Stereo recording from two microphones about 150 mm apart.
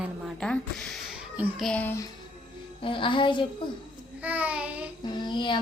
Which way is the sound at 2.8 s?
35° left (ahead or behind).